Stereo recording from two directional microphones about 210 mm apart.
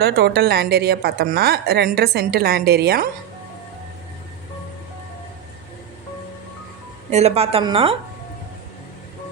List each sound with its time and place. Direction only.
0.0 s a woman's voice: 50° right (ahead or behind)
7.1 s a woman's voice: 30° right (ahead or behind)